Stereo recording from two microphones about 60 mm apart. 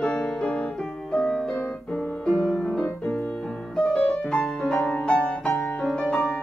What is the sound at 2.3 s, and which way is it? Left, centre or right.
Music, centre.